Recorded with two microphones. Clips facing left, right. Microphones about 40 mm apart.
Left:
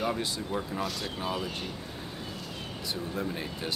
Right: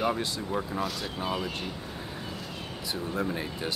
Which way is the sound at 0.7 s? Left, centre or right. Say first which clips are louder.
Right 2 dB; centre.